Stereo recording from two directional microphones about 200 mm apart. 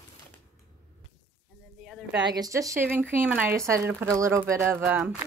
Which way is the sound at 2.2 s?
20° right (ahead or behind).